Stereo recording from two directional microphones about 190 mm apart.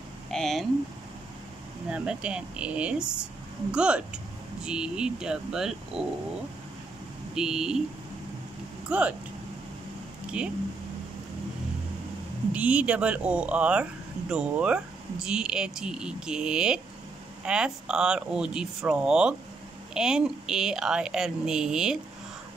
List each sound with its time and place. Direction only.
0.3 s speech: centre (ahead or behind)
1.9 s speech: 5° right (ahead or behind)
7.3 s speech: 5° right (ahead or behind)
8.8 s speech: 5° right (ahead or behind)
10.4 s speech: 5° right (ahead or behind)
12.5 s speech: 5° right (ahead or behind)